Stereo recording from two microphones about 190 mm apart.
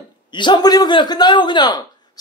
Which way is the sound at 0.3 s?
25° left (ahead or behind).